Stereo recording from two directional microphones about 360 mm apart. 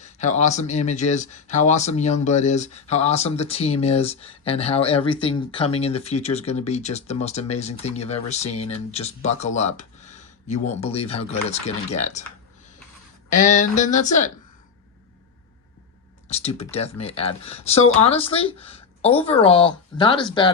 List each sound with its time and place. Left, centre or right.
0.0 s speech: centre
13.3 s speech: left
16.3 s speech: centre